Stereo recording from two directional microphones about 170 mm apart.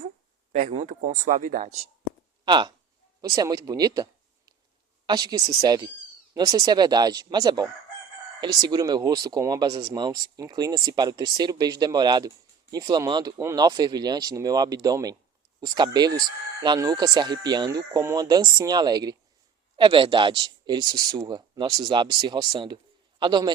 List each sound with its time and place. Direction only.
0.7 s speech: 45° right (ahead or behind)
2.4 s speech: 25° right (ahead or behind)